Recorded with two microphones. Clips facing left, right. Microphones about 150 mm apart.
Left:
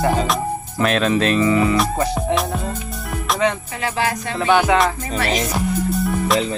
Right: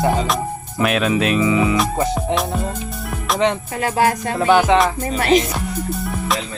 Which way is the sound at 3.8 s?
45° right (ahead or behind).